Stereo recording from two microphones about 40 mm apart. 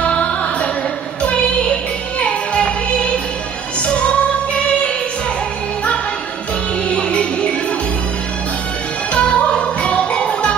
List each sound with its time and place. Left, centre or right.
0.0 s music: left
2.1 s music: left
6.9 s music: left
9.1 s music: left